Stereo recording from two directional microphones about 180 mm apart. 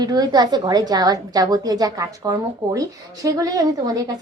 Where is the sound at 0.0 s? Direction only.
20° right (ahead or behind).